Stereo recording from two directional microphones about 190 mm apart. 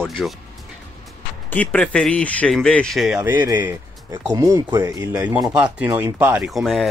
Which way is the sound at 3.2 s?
15° right (ahead or behind).